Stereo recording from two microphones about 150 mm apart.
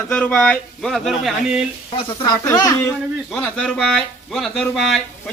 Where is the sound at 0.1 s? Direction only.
10° left (ahead or behind).